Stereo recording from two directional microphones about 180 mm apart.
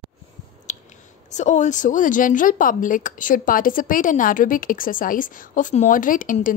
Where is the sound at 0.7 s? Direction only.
40° left (ahead or behind).